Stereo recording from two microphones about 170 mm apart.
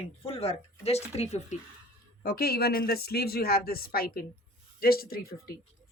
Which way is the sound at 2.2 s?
65° left (ahead or behind).